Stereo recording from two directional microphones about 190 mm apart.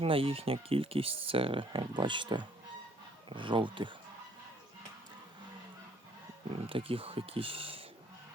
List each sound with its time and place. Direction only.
0.0 s speech: 30° right (ahead or behind)
6.5 s speech: 30° right (ahead or behind)